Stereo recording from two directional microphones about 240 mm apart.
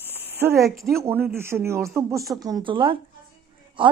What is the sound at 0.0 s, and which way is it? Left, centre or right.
A woman's voice, centre.